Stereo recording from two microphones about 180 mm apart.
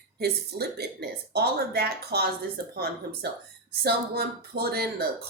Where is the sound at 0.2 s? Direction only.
60° right (ahead or behind).